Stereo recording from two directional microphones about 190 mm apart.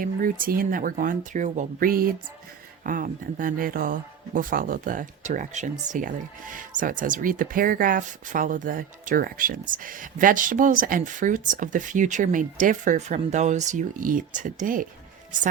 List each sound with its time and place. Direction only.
0.0 s speech: 45° right (ahead or behind)